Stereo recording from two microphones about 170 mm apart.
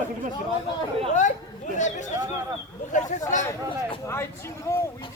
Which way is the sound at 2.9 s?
45° left (ahead or behind).